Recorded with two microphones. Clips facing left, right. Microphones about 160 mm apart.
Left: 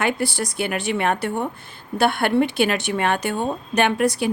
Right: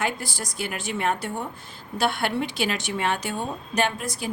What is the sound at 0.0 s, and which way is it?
A woman's voice, 65° left (ahead or behind).